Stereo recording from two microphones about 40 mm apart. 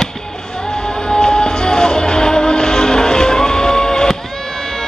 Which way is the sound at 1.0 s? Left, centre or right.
Centre.